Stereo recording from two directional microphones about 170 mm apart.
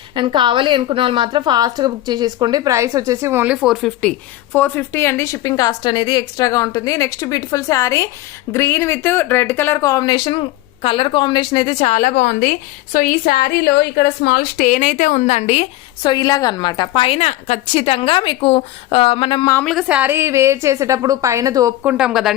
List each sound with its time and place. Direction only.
0.1 s a woman's voice: 30° right (ahead or behind); by 4.1 s centre (ahead or behind)
4.5 s a woman's voice: 10° left (ahead or behind); by 15.6 s 40° left (ahead or behind)
16.0 s speech: 25° left (ahead or behind)
19.6 s a woman's voice: 5° right (ahead or behind); by 21.7 s 20° right (ahead or behind)
21.8 s speech: 5° right (ahead or behind)